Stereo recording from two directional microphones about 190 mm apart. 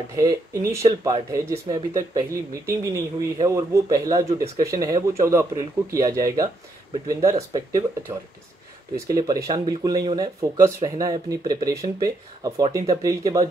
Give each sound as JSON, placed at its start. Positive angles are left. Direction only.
{"t": 0.1, "sound": "speech", "side_deg": -15}
{"t": 9.0, "sound": "speech", "side_deg": -20}